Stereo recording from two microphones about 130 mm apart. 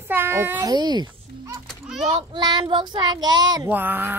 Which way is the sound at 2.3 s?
30° right (ahead or behind).